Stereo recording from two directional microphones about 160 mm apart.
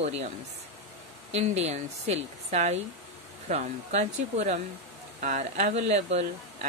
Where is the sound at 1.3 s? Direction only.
45° right (ahead or behind).